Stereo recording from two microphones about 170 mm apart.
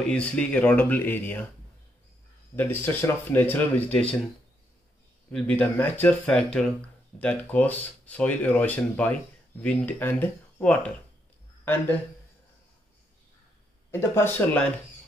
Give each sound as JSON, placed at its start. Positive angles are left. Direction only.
{"t": 0.0, "sound": "speech", "side_deg": 10}
{"t": 2.5, "sound": "speech", "side_deg": 10}
{"t": 5.3, "sound": "speech", "side_deg": 10}
{"t": 13.9, "sound": "speech", "side_deg": 15}